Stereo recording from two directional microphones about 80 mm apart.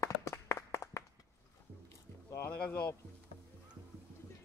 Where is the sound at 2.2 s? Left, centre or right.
Left.